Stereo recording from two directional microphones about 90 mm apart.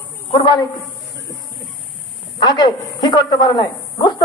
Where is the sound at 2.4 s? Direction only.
55° left (ahead or behind).